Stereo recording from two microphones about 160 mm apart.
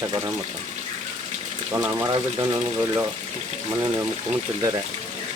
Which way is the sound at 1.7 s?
15° right (ahead or behind).